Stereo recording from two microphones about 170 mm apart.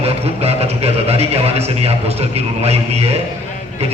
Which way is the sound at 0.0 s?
35° right (ahead or behind).